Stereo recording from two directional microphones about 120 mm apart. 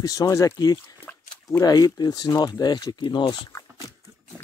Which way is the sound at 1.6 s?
30° left (ahead or behind).